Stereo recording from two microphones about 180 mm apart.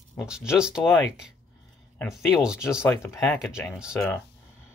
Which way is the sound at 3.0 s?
15° left (ahead or behind).